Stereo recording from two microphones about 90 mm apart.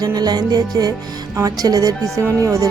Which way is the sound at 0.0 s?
45° right (ahead or behind).